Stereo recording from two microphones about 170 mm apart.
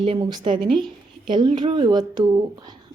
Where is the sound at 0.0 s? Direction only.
30° right (ahead or behind).